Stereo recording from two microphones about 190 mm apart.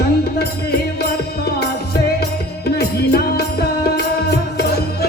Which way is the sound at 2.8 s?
55° left (ahead or behind).